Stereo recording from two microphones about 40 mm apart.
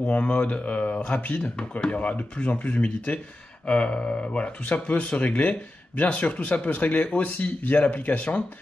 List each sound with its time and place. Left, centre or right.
0.0 s speech: left
1.4 s speech: left